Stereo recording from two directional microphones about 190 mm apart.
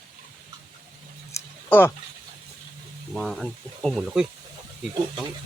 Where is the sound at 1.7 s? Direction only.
10° left (ahead or behind).